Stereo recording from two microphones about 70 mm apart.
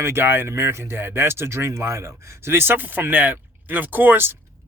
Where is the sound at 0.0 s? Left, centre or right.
Right.